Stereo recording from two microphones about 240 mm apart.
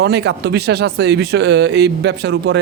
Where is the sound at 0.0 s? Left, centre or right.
Right.